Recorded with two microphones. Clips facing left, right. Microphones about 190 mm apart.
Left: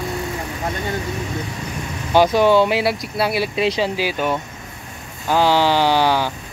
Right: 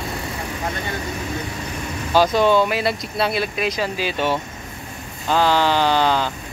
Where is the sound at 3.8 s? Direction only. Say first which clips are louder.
Left 3 dB; 10° left (ahead or behind).